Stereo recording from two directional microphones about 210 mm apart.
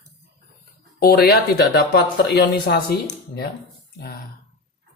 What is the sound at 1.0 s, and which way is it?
Speech, 45° left (ahead or behind).